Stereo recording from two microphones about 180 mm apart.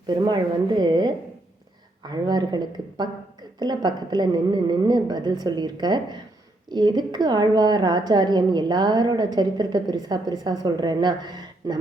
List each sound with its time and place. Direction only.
0.1 s a woman's voice: 25° right (ahead or behind)